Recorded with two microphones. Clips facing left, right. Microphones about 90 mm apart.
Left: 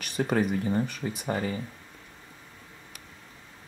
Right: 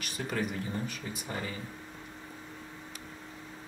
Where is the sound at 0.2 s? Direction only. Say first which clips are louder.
Left 8 dB; 50° left (ahead or behind).